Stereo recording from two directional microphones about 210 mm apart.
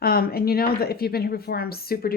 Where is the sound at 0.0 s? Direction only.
45° left (ahead or behind).